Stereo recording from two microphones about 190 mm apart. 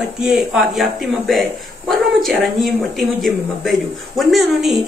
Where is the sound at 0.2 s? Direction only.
Centre (ahead or behind).